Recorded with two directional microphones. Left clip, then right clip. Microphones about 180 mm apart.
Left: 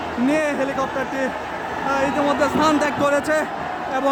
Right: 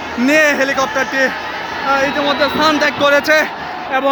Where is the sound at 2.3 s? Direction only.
5° left (ahead or behind).